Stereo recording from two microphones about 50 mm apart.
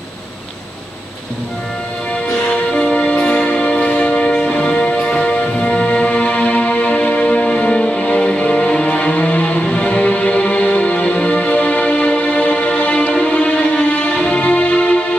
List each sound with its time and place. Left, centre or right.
2.7 s music: centre